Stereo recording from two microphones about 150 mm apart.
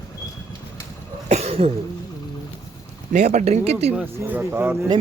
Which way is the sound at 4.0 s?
10° right (ahead or behind).